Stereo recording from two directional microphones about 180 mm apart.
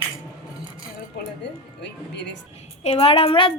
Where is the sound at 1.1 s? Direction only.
75° left (ahead or behind).